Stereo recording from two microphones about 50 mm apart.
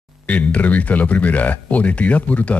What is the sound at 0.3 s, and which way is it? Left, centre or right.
Speech, left.